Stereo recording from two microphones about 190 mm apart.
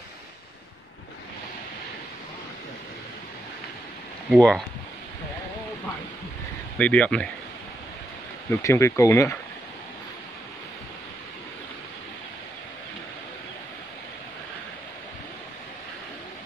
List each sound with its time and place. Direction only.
4.3 s speech: 5° left (ahead or behind)
6.8 s speech: 5° left (ahead or behind)
8.5 s speech: 15° left (ahead or behind)